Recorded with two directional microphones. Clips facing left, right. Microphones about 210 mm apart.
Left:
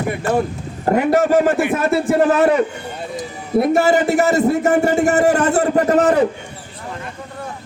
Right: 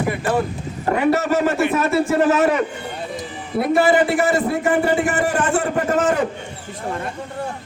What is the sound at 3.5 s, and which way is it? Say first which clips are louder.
A man's voice: left 2 dB; 45° left (ahead or behind).